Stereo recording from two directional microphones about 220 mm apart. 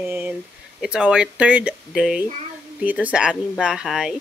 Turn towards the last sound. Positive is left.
turn(degrees=0)  # may be behind; listen again after turning